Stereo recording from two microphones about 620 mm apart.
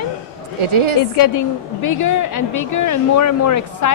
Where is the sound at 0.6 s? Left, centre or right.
Right.